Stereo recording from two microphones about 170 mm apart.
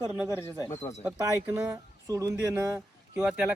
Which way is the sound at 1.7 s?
20° right (ahead or behind).